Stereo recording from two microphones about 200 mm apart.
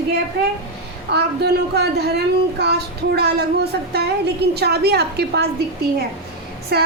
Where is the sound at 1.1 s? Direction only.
55° right (ahead or behind).